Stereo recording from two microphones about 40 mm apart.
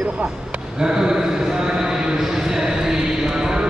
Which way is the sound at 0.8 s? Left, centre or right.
Centre.